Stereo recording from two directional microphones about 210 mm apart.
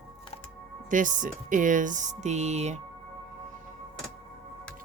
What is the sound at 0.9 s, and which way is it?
Music, 40° right (ahead or behind).